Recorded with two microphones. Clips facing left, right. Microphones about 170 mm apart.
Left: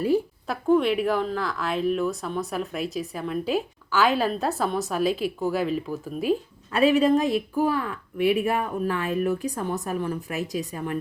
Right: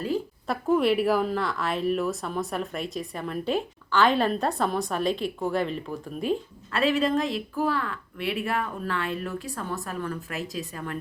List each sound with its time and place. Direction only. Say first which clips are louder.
0.4 s a woman's voice: even; centre (ahead or behind); by 10.9 s 15° left (ahead or behind)